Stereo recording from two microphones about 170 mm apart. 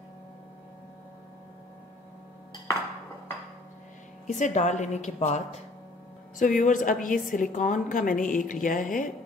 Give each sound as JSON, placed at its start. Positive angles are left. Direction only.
{"t": 4.3, "sound": "a woman's voice", "side_deg": 45}